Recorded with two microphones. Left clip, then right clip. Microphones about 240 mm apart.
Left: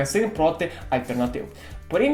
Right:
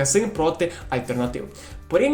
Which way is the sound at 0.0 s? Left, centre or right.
Right.